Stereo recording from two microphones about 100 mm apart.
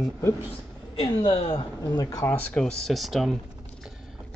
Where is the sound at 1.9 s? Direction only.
35° left (ahead or behind).